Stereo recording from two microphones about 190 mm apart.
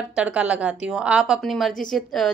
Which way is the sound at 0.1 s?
5° right (ahead or behind).